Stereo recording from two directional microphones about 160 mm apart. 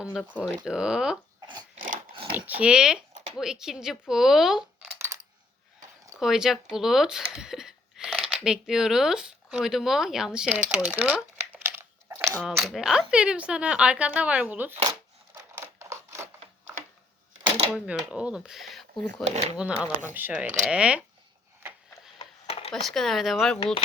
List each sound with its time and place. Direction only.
0.0 s speech: 5° right (ahead or behind)
1.7 s a sound: 55° right (ahead or behind)
2.3 s speech: 10° right (ahead or behind)
4.9 s coin: 15° right (ahead or behind)
6.1 s speech: 5° right (ahead or behind)
10.8 s crumpling: 10° right (ahead or behind)
12.4 s speech: centre (ahead or behind)
14.8 s a sound: 15° right (ahead or behind)
17.7 s speech: 5° right (ahead or behind)
22.2 s a sound: 40° left (ahead or behind)
22.7 s speech: centre (ahead or behind)